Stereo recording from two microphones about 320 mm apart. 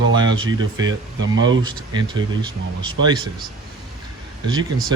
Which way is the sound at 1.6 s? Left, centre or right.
Centre.